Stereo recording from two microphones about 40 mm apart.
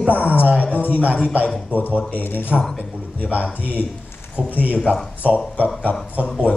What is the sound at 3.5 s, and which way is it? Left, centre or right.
Speech, left.